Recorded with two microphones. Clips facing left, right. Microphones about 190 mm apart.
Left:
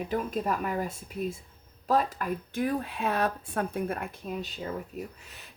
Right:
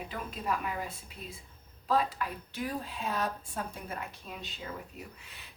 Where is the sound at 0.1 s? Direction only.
45° left (ahead or behind).